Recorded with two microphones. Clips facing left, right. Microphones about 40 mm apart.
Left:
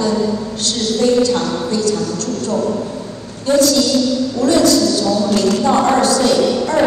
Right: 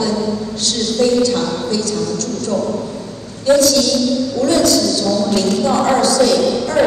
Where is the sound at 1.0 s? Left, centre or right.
Left.